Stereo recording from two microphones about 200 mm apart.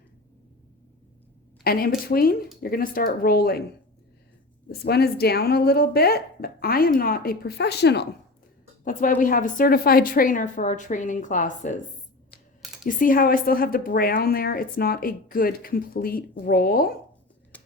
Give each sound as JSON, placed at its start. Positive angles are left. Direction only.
{"t": 1.6, "sound": "a woman's voice", "side_deg": 50}
{"t": 4.7, "sound": "a woman's voice", "side_deg": 50}
{"t": 8.8, "sound": "a woman's voice", "side_deg": 40}
{"t": 12.8, "sound": "a woman's voice", "side_deg": 45}
{"t": 17.5, "sound": "a sound", "side_deg": 10}